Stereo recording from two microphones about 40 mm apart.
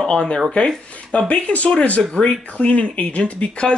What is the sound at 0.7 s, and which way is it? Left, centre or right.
Speech, centre.